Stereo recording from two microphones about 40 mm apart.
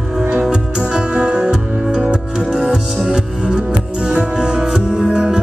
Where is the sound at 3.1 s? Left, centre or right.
Right.